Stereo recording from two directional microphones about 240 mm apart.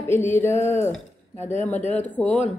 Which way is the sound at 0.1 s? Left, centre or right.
Centre.